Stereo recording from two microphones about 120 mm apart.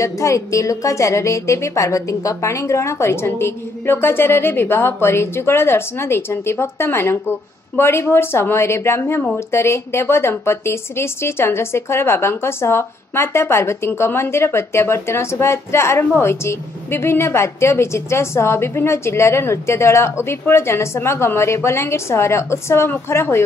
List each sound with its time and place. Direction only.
0.0 s a woman's voice: 25° left (ahead or behind)